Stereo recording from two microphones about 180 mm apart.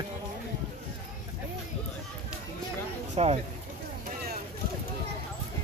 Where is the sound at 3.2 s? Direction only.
35° right (ahead or behind).